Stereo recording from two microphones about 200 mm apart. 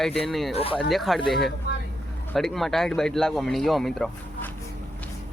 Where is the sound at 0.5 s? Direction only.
30° left (ahead or behind).